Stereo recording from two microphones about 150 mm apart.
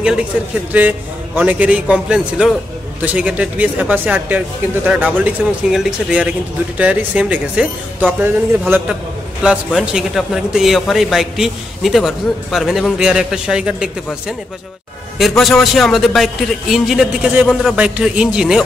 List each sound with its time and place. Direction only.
0.7 s a man's voice: 10° right (ahead or behind)
15.1 s a man's voice: centre (ahead or behind)